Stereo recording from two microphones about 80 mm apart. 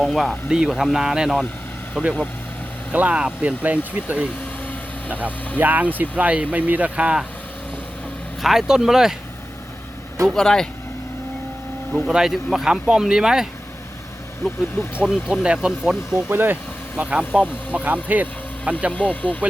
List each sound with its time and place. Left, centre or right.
0.0 s speech: centre
8.4 s speech: centre
10.3 s speech: centre
11.9 s speech: centre
15.0 s speech: centre
16.3 s speech: right
17.0 s speech: centre